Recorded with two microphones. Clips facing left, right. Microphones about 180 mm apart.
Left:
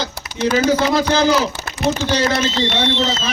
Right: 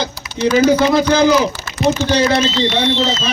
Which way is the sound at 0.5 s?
15° right (ahead or behind).